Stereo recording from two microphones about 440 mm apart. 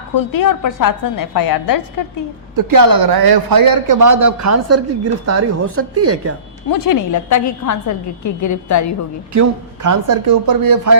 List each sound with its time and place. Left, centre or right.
0.1 s a woman's voice: left
2.6 s speech: right
6.7 s a woman's voice: left
9.3 s speech: right